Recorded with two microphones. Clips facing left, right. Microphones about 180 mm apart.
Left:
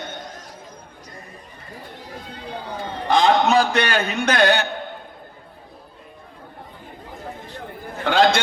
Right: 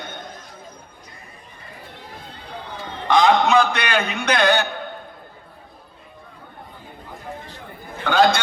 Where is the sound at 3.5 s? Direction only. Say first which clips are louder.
Even; 35° left (ahead or behind).